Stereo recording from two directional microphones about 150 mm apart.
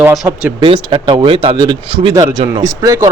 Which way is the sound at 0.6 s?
35° right (ahead or behind).